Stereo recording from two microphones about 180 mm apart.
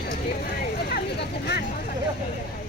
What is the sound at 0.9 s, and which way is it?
Vehicle, 65° left (ahead or behind).